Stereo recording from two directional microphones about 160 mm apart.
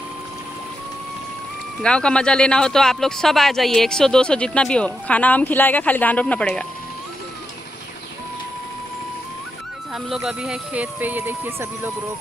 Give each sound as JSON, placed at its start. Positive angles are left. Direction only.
{"t": 1.8, "sound": "speech", "side_deg": 5}
{"t": 9.9, "sound": "speech", "side_deg": -5}